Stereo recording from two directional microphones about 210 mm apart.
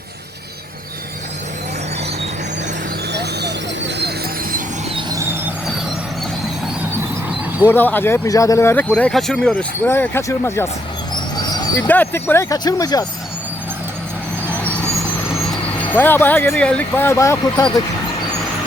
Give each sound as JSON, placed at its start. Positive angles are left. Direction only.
{"t": 3.1, "sound": "a sound", "side_deg": -55}
{"t": 4.9, "sound": "vehicle", "side_deg": -15}
{"t": 7.6, "sound": "speech", "side_deg": 10}
{"t": 15.4, "sound": "speech", "side_deg": 5}